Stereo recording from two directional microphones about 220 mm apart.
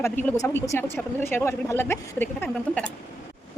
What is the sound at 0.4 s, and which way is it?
A woman's voice, 10° left (ahead or behind).